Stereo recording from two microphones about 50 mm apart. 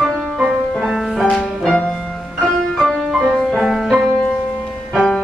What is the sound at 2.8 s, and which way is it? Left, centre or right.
Music, centre.